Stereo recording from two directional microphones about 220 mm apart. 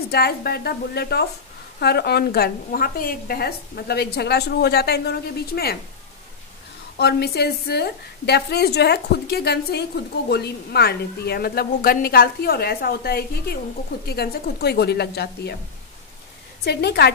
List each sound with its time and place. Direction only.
0.1 s a woman's voice: 45° left (ahead or behind)
7.0 s a woman's voice: 50° left (ahead or behind)
16.6 s a woman's voice: 50° left (ahead or behind)